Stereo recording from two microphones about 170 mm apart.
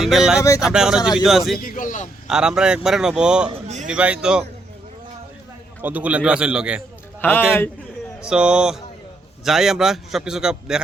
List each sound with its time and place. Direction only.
0.0 s a man's voice: centre (ahead or behind)
1.5 s a man's voice: 55° left (ahead or behind)
2.2 s a man's voice: 5° right (ahead or behind)
5.8 s a man's voice: 10° right (ahead or behind)
7.2 s a man's voice: 10° left (ahead or behind)
8.2 s a man's voice: 5° right (ahead or behind)